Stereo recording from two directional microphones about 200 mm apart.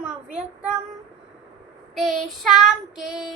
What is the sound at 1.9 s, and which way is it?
Child singing, centre (ahead or behind).